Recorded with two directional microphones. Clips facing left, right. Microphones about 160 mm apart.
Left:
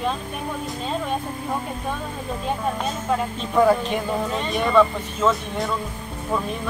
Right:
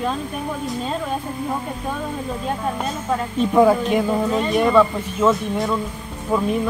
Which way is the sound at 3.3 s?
10° right (ahead or behind).